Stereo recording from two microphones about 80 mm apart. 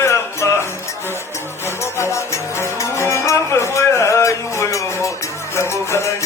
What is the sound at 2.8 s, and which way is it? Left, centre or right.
Music, left.